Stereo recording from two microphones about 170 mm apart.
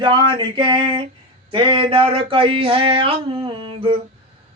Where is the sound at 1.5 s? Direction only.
30° right (ahead or behind).